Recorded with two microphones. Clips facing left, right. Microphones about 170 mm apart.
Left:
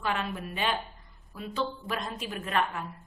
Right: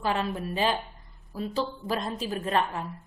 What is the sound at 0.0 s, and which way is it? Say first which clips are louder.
A woman's voice: right 4 dB; 35° right (ahead or behind).